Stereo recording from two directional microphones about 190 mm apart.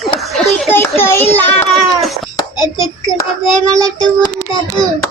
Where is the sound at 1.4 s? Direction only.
5° left (ahead or behind).